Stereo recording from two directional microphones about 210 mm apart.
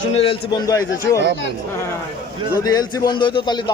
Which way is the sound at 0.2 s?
25° left (ahead or behind).